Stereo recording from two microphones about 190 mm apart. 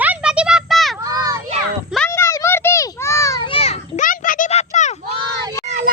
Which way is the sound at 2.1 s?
15° left (ahead or behind).